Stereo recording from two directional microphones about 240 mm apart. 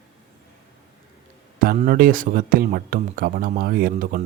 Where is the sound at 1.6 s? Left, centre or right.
Right.